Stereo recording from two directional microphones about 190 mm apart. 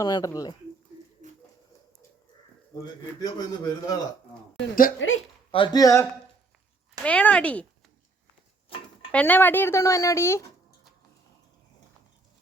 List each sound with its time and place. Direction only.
0.0 s a man's voice: 20° left (ahead or behind)
1.2 s a sound: 40° right (ahead or behind)
2.7 s a man's voice: 20° left (ahead or behind)
4.9 s speech: 90° left
5.5 s a man's voice: 25° left (ahead or behind); by 7.7 s 5° left (ahead or behind)
9.1 s speech: 10° left (ahead or behind)